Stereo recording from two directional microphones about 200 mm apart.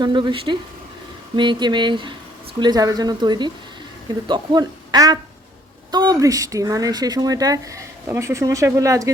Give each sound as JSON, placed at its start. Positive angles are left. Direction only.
{"t": 0.0, "sound": "speech", "side_deg": -25}